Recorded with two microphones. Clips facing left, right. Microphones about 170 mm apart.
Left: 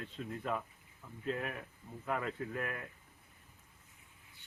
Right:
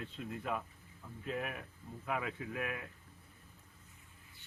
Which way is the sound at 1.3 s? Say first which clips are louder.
Left 2 dB; 5° right (ahead or behind).